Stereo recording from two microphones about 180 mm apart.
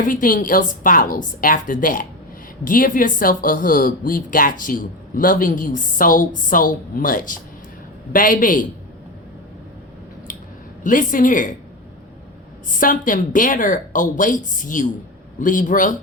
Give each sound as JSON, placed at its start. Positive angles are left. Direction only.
{"t": 0.0, "sound": "speech", "side_deg": 50}
{"t": 10.8, "sound": "speech", "side_deg": 50}
{"t": 12.7, "sound": "speech", "side_deg": 50}